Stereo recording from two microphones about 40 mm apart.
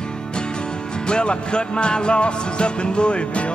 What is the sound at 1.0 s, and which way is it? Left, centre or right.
Music, left.